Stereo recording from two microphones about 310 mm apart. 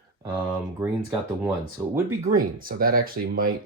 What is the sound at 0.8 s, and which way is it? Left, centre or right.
Speech, centre.